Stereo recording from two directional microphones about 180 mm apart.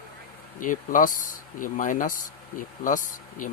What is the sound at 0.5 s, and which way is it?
Speech, 50° left (ahead or behind).